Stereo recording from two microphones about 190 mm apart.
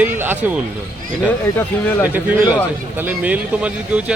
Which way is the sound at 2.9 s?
10° right (ahead or behind).